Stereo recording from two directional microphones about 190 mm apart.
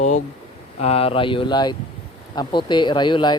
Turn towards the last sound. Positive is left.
turn(degrees=25)  # may be behind; listen again after turning